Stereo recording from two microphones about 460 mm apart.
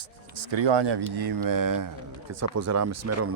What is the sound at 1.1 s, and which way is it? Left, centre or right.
Speech, right.